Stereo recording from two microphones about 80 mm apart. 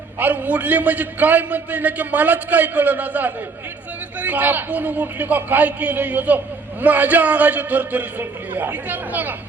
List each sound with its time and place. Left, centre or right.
0.2 s a man's voice: right